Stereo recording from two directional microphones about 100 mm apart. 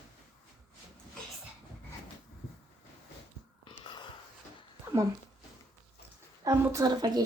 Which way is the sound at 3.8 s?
50° left (ahead or behind).